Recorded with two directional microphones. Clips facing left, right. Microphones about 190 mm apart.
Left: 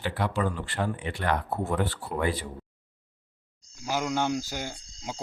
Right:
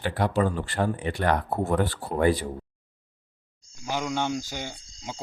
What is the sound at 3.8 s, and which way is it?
Speech, 5° left (ahead or behind).